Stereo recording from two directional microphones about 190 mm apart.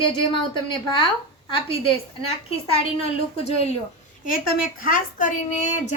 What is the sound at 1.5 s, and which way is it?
Speech, 30° left (ahead or behind).